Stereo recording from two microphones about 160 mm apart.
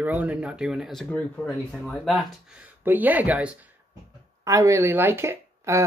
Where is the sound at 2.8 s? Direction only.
10° right (ahead or behind).